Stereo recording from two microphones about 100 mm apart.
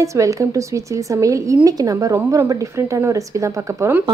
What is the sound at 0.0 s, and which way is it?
Speech, 30° right (ahead or behind).